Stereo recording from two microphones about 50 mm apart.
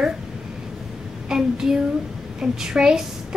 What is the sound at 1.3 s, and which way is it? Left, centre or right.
A woman's voice, centre.